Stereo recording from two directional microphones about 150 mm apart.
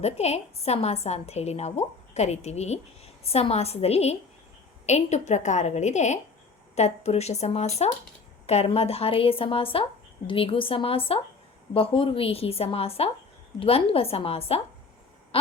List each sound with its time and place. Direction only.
0.0 s a woman's voice: 45° left (ahead or behind)